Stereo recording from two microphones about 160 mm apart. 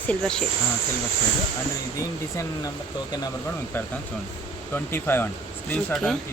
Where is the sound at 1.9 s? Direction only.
20° left (ahead or behind).